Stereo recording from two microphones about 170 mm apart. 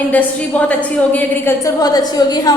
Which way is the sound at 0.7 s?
10° left (ahead or behind).